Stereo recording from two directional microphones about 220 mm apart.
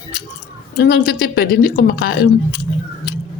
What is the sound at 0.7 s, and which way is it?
Speech, 50° left (ahead or behind).